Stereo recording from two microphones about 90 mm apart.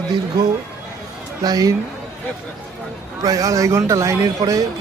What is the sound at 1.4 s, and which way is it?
Speech, 45° right (ahead or behind).